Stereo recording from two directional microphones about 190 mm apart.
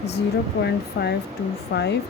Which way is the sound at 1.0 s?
60° left (ahead or behind).